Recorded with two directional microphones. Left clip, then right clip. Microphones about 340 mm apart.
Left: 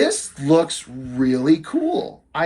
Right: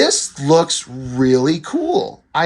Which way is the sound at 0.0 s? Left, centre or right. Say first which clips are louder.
Right 4 dB; centre.